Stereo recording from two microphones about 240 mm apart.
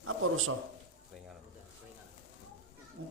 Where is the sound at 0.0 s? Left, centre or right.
Right.